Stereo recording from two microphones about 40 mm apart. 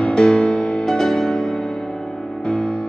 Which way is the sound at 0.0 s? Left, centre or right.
Left.